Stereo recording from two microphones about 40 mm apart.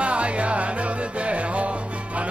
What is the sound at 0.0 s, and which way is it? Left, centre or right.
Music, right.